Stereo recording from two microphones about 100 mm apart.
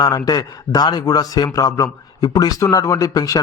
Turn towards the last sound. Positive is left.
turn(degrees=40)  # may be behind; listen again after turning